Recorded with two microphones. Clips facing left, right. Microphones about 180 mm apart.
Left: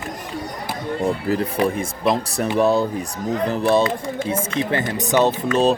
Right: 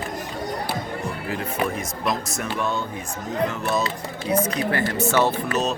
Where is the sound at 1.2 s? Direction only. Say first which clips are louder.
Left 2 dB; 35° left (ahead or behind); by 5.3 s 20° left (ahead or behind).